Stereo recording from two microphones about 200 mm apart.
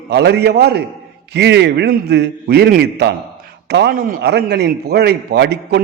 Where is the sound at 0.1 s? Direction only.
55° right (ahead or behind).